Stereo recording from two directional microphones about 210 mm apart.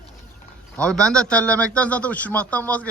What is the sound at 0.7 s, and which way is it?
A man's voice, 5° left (ahead or behind).